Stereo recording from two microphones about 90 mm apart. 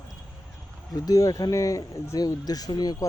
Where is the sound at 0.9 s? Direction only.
40° left (ahead or behind).